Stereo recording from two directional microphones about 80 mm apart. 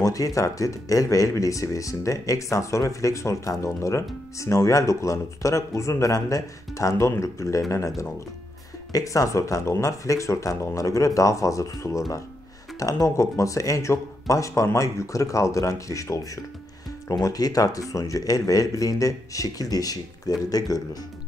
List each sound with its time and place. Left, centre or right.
0.0 s speech: left
8.9 s speech: left
17.2 s speech: left